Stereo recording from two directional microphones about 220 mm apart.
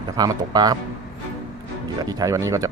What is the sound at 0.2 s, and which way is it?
Speech, 15° right (ahead or behind).